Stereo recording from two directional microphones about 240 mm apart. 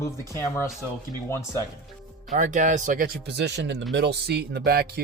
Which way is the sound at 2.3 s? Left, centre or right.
Right.